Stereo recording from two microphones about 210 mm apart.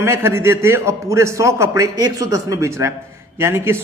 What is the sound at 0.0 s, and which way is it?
A man's voice, 10° right (ahead or behind).